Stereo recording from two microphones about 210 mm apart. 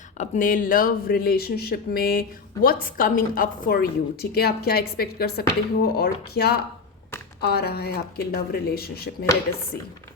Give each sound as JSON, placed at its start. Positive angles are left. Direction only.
{"t": 0.2, "sound": "a woman's voice", "side_deg": 40}